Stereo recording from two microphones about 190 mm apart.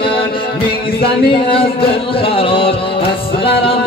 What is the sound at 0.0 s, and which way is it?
Music, 30° left (ahead or behind).